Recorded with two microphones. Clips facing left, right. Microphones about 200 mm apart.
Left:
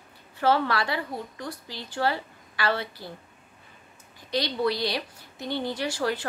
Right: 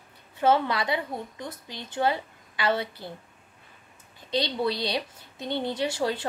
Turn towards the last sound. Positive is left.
turn(degrees=-25)  # may be behind; listen again after turning